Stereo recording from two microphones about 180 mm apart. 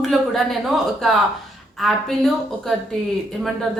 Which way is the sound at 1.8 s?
Centre (ahead or behind).